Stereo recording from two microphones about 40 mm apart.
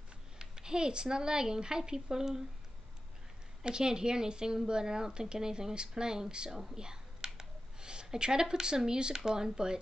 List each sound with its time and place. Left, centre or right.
0.4 s speech: centre
3.6 s speech: centre